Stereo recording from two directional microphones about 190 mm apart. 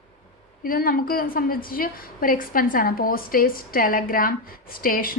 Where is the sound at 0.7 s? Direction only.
50° left (ahead or behind).